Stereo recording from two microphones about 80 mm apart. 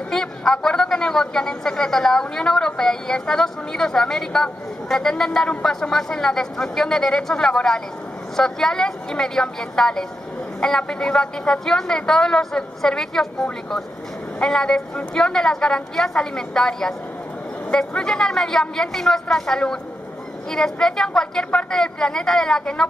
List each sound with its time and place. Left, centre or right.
0.1 s a woman's voice: centre